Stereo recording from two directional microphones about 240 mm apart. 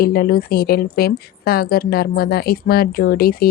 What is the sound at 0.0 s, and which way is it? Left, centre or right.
A woman's voice, left.